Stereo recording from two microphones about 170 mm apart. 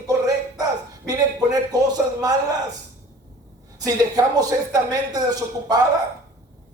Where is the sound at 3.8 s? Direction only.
20° right (ahead or behind).